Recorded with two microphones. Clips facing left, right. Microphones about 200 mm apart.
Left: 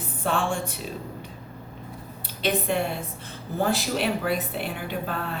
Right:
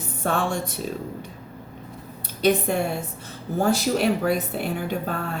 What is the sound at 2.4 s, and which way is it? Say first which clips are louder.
A woman's voice: right 4 dB; 45° right (ahead or behind).